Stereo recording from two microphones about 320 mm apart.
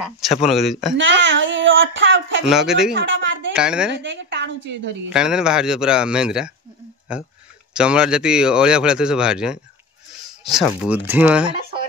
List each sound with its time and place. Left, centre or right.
0.0 s speech: centre
0.9 s speech: right
2.4 s speech: centre
2.9 s a sound: right
3.5 s speech: centre
3.9 s a woman's voice: right
5.1 s speech: centre